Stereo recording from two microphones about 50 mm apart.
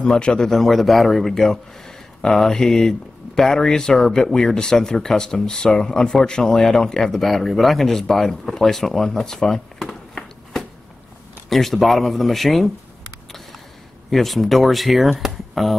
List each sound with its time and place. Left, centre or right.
0.0 s speech: centre
0.5 s speech: centre
9.8 s a sound: centre
11.4 s speech: centre
14.1 s speech: centre